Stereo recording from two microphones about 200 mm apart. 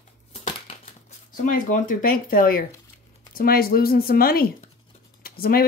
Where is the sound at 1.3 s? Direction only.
40° left (ahead or behind).